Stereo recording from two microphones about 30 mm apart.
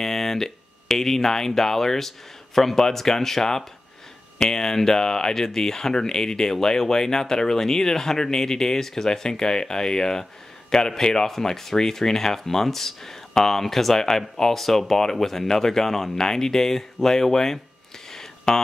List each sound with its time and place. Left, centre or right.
0.0 s speech: centre
11.3 s speech: centre